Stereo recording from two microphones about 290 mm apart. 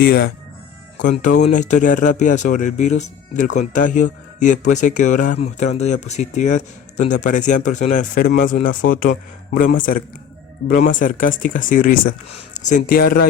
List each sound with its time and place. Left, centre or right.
0.0 s speech: left